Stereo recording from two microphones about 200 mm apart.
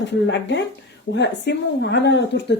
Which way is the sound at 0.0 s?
60° left (ahead or behind).